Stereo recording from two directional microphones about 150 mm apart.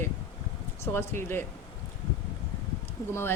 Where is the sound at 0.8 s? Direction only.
15° left (ahead or behind).